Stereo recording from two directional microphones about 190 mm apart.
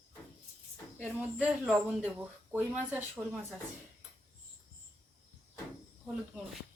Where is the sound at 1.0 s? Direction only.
5° right (ahead or behind).